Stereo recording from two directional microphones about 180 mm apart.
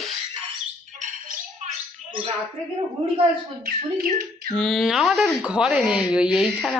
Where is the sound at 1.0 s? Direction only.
40° right (ahead or behind).